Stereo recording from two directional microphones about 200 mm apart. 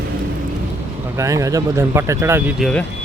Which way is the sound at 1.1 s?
15° right (ahead or behind).